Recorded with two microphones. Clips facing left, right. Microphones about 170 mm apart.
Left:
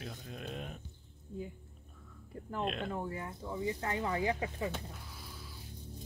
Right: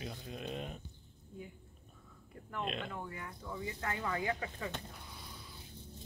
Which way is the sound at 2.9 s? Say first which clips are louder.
Left 6 dB; 30° left (ahead or behind).